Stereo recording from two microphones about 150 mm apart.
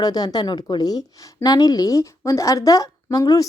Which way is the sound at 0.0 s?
25° left (ahead or behind).